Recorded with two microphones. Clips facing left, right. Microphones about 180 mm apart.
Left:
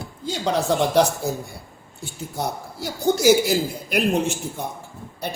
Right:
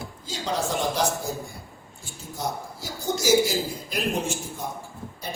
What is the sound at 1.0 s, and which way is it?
Speech, 65° left (ahead or behind).